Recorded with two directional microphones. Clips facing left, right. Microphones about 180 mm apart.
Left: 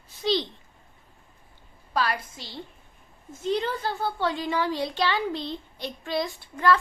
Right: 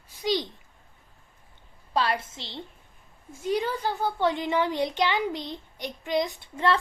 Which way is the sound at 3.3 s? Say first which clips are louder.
Even; 10° right (ahead or behind).